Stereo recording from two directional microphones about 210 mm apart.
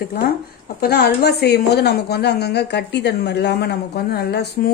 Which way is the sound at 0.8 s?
50° left (ahead or behind).